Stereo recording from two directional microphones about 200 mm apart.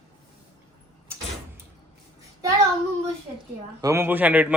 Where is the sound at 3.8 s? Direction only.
15° right (ahead or behind).